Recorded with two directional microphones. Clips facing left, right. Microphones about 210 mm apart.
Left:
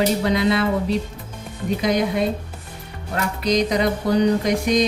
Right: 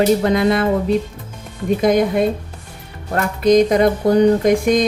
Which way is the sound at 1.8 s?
50° right (ahead or behind).